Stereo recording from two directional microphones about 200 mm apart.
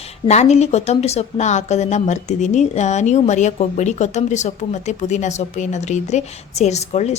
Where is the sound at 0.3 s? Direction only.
35° left (ahead or behind).